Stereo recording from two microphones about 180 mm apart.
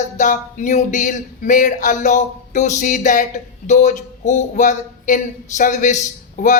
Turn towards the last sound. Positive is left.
turn(degrees=45)  # may be behind; listen again after turning